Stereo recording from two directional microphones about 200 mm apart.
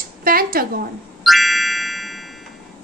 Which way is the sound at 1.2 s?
Centre (ahead or behind).